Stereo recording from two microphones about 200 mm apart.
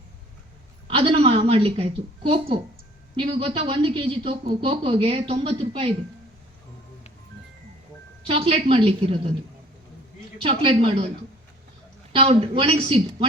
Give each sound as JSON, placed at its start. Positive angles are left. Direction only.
{"t": 0.9, "sound": "a woman's voice", "side_deg": -30}
{"t": 8.3, "sound": "speech", "side_deg": -30}
{"t": 10.4, "sound": "speech", "side_deg": -30}
{"t": 12.1, "sound": "speech", "side_deg": -30}